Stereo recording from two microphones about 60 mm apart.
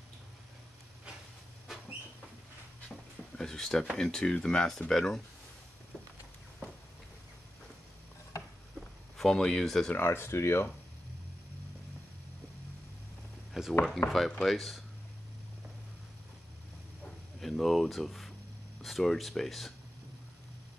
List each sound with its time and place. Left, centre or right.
3.3 s speech: centre
9.1 s speech: centre
9.9 s speech: left
13.5 s a sound: centre
14.0 s speech: centre
17.4 s a sound: centre
18.8 s speech: centre